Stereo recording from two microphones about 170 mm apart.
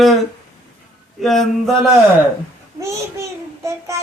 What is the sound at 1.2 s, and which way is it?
Speech, centre (ahead or behind).